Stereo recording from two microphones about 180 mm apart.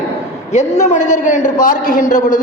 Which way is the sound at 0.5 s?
40° left (ahead or behind).